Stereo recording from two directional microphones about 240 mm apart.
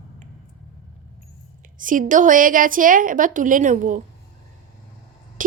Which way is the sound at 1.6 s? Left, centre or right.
Right.